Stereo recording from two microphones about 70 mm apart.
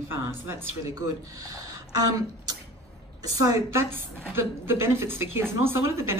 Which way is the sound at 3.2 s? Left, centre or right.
Right.